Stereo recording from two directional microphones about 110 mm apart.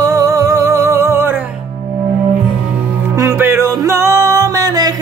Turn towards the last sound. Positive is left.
turn(degrees=-30)  # may be behind; listen again after turning